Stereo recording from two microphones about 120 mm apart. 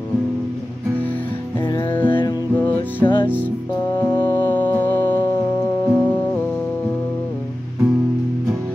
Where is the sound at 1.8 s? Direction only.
15° left (ahead or behind).